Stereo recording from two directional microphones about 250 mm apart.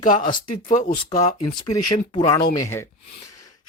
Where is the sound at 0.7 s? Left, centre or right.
Left.